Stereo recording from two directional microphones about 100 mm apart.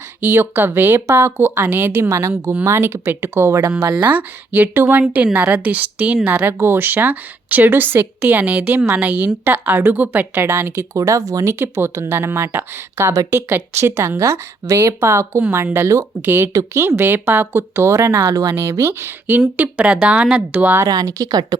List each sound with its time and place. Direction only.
0.3 s a woman's voice: 25° right (ahead or behind)
2.0 s a woman's voice: 30° right (ahead or behind)
19.5 s a woman's voice: 15° right (ahead or behind)
20.7 s speech: 35° right (ahead or behind)